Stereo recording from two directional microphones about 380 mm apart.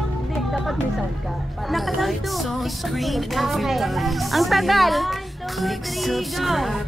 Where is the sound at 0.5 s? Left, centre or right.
Centre.